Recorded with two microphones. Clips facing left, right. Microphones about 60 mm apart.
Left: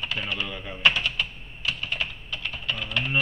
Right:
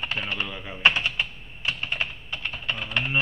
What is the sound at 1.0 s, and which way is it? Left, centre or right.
Typing, right.